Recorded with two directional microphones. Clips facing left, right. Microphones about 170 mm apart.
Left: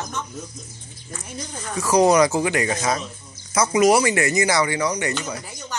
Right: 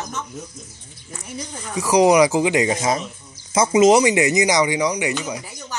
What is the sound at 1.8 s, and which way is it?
A child's voice, 15° right (ahead or behind).